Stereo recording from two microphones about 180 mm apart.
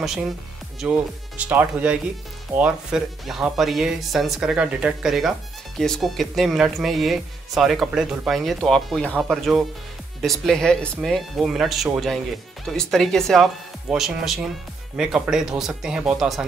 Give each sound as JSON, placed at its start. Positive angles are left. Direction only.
{"t": 0.7, "sound": "speech", "side_deg": -5}